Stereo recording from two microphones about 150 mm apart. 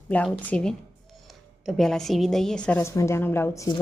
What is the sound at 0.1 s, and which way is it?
Speech, 10° left (ahead or behind).